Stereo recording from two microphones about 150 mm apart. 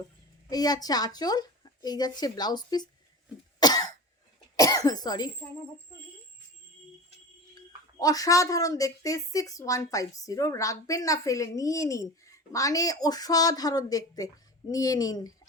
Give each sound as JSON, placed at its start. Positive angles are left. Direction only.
{"t": 0.5, "sound": "a woman's voice", "side_deg": 25}
{"t": 3.6, "sound": "cough", "side_deg": 25}
{"t": 7.5, "sound": "a woman's voice", "side_deg": 25}